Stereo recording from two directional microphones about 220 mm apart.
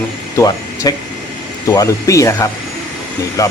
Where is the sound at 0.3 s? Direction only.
15° left (ahead or behind).